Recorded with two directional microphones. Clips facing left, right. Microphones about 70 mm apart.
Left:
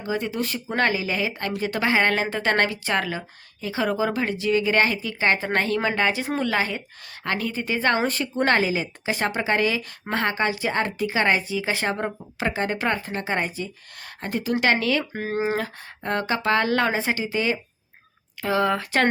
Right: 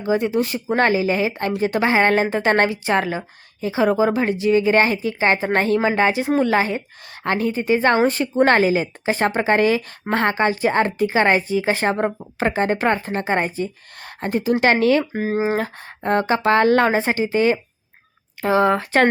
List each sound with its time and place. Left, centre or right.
0.0 s a woman's voice: right
15.1 s speech: centre
15.5 s speech: right